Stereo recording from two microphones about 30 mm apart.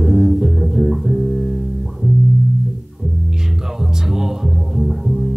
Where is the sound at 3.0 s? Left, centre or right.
Right.